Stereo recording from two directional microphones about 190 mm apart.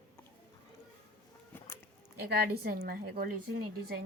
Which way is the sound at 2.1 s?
55° right (ahead or behind).